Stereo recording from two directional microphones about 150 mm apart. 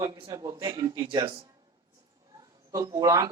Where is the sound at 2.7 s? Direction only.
20° right (ahead or behind).